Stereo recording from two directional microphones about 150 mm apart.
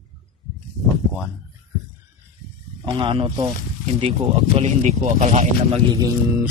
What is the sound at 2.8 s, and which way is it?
Speech, 35° right (ahead or behind).